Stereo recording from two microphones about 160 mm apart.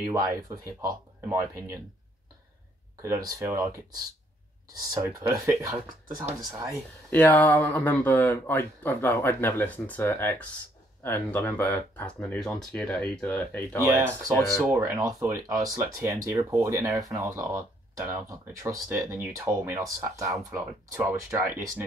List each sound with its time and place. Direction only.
0.0 s speech: 20° right (ahead or behind)
3.0 s speech: 20° right (ahead or behind)
4.9 s speech: 15° right (ahead or behind)
7.1 s speech: 10° left (ahead or behind)
14.6 s speech: 15° right (ahead or behind)